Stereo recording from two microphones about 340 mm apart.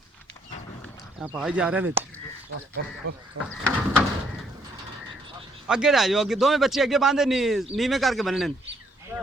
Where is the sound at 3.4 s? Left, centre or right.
Right.